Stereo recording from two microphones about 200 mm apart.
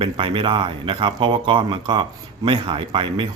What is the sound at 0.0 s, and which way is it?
Speech, 25° right (ahead or behind).